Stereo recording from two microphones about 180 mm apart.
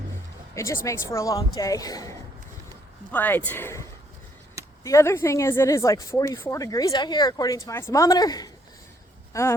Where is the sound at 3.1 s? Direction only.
10° left (ahead or behind).